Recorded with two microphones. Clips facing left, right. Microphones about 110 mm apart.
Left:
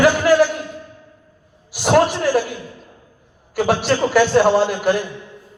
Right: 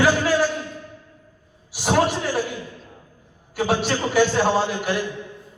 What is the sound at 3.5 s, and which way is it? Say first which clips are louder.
Speech: left 5 dB; 70° left (ahead or behind).